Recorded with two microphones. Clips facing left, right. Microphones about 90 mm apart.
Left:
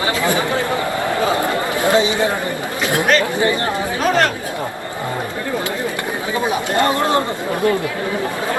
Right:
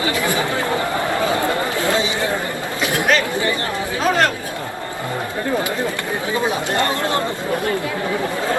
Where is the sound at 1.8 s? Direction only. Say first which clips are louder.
Left 7 dB; 20° left (ahead or behind).